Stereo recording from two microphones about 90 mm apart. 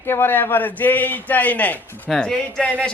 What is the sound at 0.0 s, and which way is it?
A man's voice, 25° left (ahead or behind).